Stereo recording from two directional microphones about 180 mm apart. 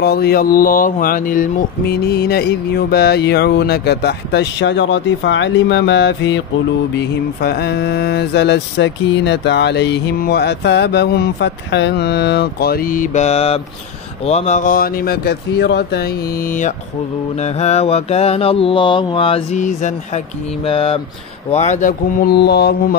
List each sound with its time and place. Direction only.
0.0 s speech: 60° left (ahead or behind); by 6.4 s 80° left
7.0 s mantra: 65° left (ahead or behind); by 13.6 s 35° left (ahead or behind)
14.2 s speech: 35° left (ahead or behind)
17.4 s mantra: 35° left (ahead or behind)
20.6 s mantra: 30° left (ahead or behind)
21.5 s speech: 40° left (ahead or behind); by 22.9 s 65° left (ahead or behind)